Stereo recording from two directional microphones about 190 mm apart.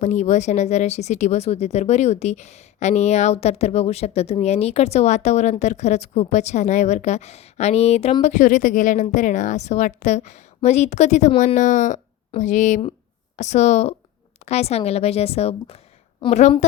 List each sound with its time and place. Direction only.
0.0 s speech: 40° left (ahead or behind)